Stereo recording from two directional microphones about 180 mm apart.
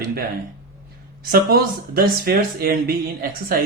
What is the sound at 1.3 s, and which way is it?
Speech, 55° right (ahead or behind).